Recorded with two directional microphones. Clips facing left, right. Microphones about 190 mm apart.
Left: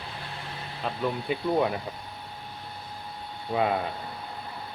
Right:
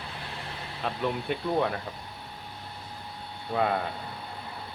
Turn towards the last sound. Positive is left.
turn(degrees=5)  # may be behind; listen again after turning